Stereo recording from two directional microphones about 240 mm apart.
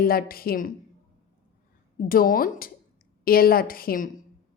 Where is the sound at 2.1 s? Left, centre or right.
Left.